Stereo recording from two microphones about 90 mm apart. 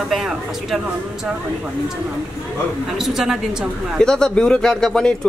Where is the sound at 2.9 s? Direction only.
5° right (ahead or behind).